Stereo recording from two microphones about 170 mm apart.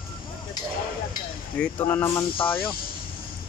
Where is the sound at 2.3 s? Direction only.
30° left (ahead or behind).